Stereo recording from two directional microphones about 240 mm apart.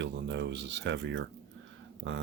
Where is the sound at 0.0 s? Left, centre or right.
Right.